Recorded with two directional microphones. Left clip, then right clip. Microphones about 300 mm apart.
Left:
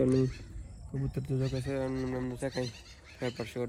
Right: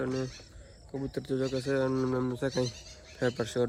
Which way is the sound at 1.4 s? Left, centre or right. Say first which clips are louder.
Right 5 dB; centre.